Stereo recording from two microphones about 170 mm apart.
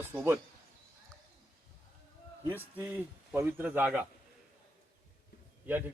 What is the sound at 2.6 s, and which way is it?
Speech, 10° right (ahead or behind).